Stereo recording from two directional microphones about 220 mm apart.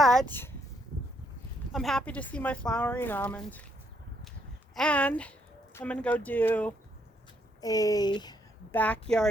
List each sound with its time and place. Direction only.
0.0 s a sound: centre (ahead or behind)
1.7 s a woman's voice: centre (ahead or behind)
4.7 s a woman's voice: 5° left (ahead or behind)
8.7 s speech: 5° left (ahead or behind)